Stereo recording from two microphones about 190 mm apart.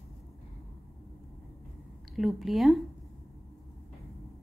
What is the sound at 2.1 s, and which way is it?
Speech, centre (ahead or behind).